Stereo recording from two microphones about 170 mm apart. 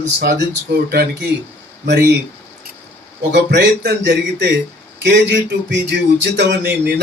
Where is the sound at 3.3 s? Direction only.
85° right.